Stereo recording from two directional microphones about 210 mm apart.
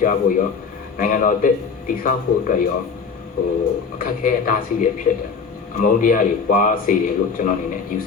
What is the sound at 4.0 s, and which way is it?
A man's voice, 40° left (ahead or behind).